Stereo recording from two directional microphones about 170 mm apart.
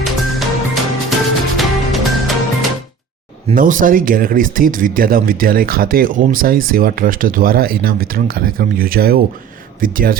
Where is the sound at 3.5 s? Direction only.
55° right (ahead or behind).